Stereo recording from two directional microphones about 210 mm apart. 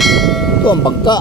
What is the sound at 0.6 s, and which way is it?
Speech, 20° left (ahead or behind).